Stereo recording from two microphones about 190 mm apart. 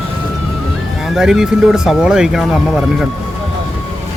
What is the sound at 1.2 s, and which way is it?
Speech, 5° right (ahead or behind).